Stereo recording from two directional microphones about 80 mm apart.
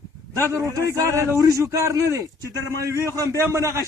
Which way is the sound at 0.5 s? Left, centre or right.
Right.